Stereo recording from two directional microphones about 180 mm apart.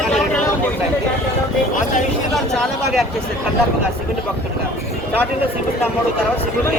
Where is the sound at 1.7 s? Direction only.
45° left (ahead or behind).